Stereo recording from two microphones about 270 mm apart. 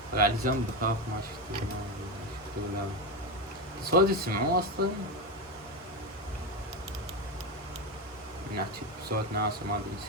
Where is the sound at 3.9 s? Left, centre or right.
Right.